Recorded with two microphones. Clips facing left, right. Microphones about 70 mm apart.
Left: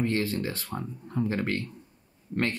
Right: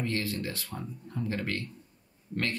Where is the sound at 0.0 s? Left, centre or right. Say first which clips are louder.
Left 5 dB; left.